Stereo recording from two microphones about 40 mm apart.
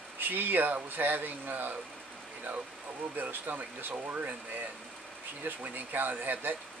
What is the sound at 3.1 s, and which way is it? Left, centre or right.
Speech, right.